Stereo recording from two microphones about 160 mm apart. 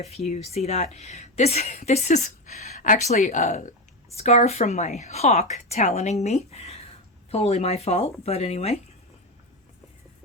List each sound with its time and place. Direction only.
0.0 s speech: 45° left (ahead or behind)